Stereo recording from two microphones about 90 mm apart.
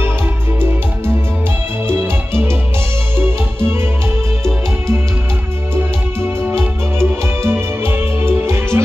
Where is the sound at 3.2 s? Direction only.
25° right (ahead or behind).